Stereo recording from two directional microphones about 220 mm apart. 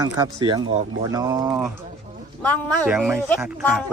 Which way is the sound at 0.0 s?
20° right (ahead or behind).